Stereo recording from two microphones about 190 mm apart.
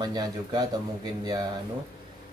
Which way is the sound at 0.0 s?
20° right (ahead or behind).